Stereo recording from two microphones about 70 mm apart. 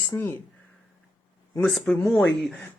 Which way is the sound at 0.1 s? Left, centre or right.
Left.